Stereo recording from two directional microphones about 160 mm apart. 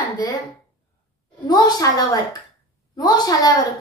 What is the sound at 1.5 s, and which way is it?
Speech, 25° left (ahead or behind).